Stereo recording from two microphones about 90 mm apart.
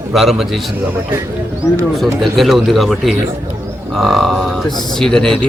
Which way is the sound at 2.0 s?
Centre (ahead or behind).